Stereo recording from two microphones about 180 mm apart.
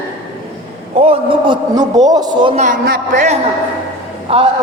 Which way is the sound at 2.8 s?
55° right (ahead or behind).